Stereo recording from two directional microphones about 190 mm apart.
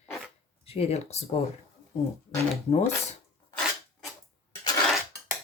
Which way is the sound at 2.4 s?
35° left (ahead or behind).